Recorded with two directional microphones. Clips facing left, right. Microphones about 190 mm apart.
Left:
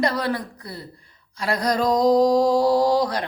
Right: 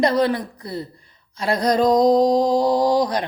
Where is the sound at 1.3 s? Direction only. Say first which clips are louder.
Right 4 dB; 20° right (ahead or behind).